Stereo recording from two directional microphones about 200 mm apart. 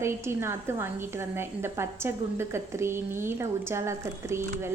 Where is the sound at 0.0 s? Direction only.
15° right (ahead or behind).